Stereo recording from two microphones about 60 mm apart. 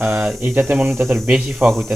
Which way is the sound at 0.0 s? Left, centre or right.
Centre.